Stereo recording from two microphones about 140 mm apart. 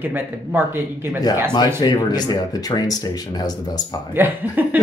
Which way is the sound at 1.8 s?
30° left (ahead or behind).